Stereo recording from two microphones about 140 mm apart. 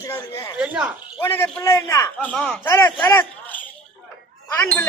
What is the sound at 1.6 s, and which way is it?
Speech, 25° left (ahead or behind).